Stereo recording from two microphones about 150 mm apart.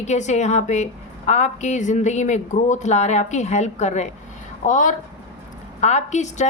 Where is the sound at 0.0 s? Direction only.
50° left (ahead or behind).